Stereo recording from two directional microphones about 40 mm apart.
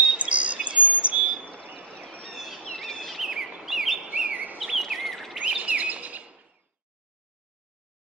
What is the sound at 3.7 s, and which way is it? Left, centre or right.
Chirp, centre.